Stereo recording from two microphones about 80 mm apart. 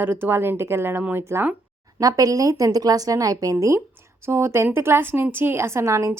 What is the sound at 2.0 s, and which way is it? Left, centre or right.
A woman's voice, right.